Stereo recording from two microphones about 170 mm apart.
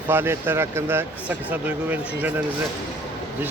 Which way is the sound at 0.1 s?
15° right (ahead or behind).